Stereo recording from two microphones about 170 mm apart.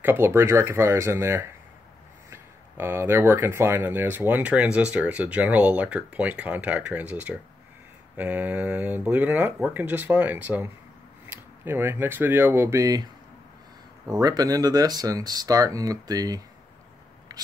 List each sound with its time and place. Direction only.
0.0 s speech: 15° right (ahead or behind)